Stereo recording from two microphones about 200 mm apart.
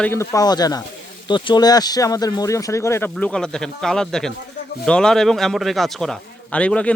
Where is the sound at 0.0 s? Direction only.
15° left (ahead or behind).